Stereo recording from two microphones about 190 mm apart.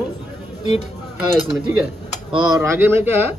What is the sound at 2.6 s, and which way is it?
Speech, 15° right (ahead or behind).